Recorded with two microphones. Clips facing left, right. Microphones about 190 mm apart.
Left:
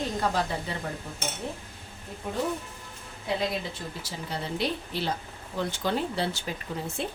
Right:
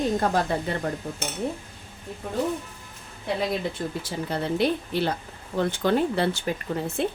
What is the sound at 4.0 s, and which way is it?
Speech, 55° right (ahead or behind).